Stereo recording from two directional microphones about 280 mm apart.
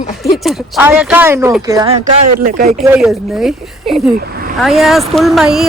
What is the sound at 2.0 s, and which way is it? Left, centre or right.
Speech, right.